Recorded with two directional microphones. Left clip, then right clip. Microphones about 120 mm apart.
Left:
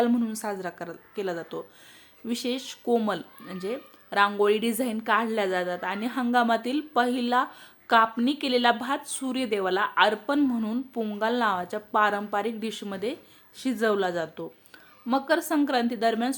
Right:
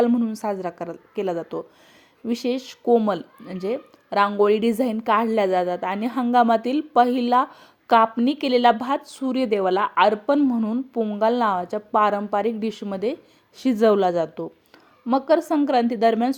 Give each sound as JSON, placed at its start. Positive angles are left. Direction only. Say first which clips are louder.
{"t": 0.1, "sound": "a woman's voice", "louder": "right 4 dB", "side_deg": -25}
{"t": 0.3, "sound": "a woman's voice", "louder": "right 6 dB", "side_deg": -40}
{"t": 11.2, "sound": "speech", "louder": "right 5 dB", "side_deg": -40}
{"t": 13.6, "sound": "a woman's voice", "louder": "right 7 dB", "side_deg": -55}
{"t": 15.0, "sound": "speech", "louder": "right 6 dB", "side_deg": -35}